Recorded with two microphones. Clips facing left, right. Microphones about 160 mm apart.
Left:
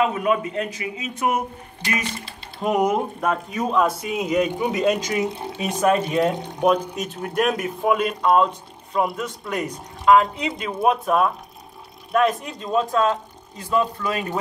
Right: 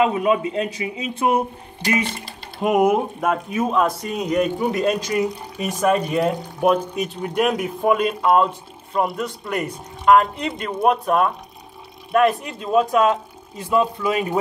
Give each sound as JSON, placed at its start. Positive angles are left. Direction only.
{"t": 0.0, "sound": "a man's voice", "side_deg": -25}
{"t": 2.6, "sound": "speech", "side_deg": -5}
{"t": 5.3, "sound": "speech", "side_deg": 25}
{"t": 5.6, "sound": "speech", "side_deg": 0}